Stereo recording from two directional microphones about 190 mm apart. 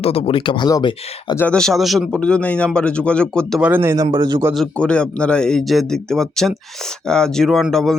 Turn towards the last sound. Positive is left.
turn(degrees=0)  # may be behind; listen again after turning